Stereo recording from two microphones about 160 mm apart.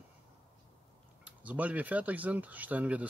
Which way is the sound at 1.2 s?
10° right (ahead or behind).